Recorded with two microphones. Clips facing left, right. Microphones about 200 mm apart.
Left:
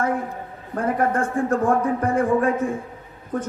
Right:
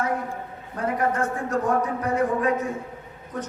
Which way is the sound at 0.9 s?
50° left (ahead or behind).